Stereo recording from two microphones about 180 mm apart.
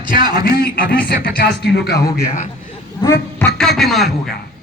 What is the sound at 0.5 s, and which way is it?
Speech, 60° left (ahead or behind).